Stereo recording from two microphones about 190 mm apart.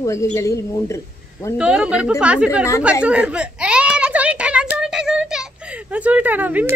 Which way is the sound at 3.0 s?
5° right (ahead or behind).